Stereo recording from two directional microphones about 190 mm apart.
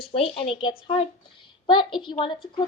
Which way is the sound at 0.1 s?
30° left (ahead or behind).